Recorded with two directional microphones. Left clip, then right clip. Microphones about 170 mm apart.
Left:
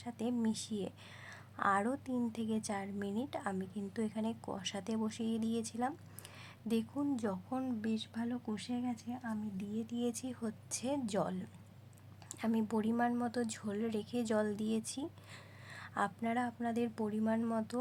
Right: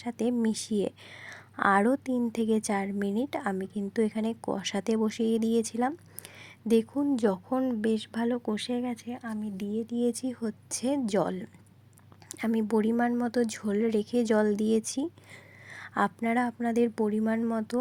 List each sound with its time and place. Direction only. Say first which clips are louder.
0.0 s a woman's voice: right 9 dB; 35° right (ahead or behind)
7.8 s speech: right 11 dB; 45° right (ahead or behind)
9.7 s a woman's voice: right 10 dB; 30° right (ahead or behind)